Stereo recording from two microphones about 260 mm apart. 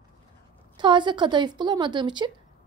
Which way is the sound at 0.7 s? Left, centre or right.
Centre.